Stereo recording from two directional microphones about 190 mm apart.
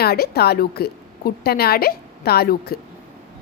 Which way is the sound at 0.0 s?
55° left (ahead or behind).